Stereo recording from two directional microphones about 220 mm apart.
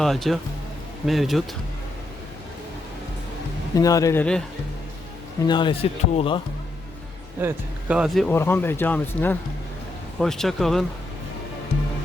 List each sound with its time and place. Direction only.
0.0 s speech: centre (ahead or behind)
3.8 s speech: 15° left (ahead or behind)
5.5 s speech: 20° left (ahead or behind)
7.4 s speech: 5° right (ahead or behind)